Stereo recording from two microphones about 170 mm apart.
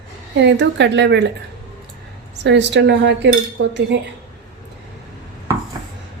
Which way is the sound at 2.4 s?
90° right.